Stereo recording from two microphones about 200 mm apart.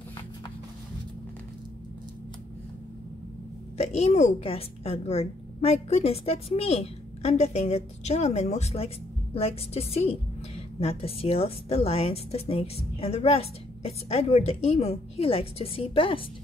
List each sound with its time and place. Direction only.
3.7 s a woman's voice: 30° left (ahead or behind)